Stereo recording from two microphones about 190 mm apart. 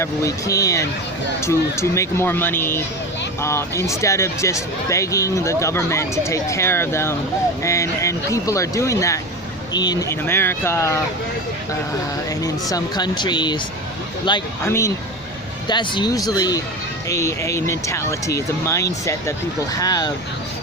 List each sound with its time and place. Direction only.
0.0 s speech: 15° left (ahead or behind)
12.4 s speech: 20° left (ahead or behind)
14.6 s speech: 15° left (ahead or behind)